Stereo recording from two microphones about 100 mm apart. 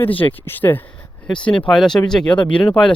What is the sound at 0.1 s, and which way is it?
Speech, 65° left (ahead or behind).